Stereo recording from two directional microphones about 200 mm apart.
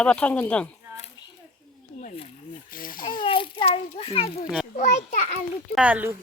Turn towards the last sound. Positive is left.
turn(degrees=-10)  # may be behind; listen again after turning